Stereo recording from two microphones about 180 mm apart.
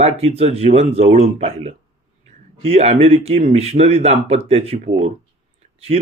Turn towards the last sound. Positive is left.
turn(degrees=-35)  # may be behind; listen again after turning